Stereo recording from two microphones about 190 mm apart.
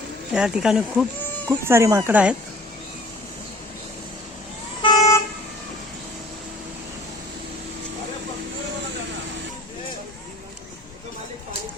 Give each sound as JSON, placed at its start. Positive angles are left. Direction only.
{"t": 0.3, "sound": "speech", "side_deg": -5}
{"t": 1.5, "sound": "speech", "side_deg": -15}
{"t": 4.8, "sound": "vehicle", "side_deg": 20}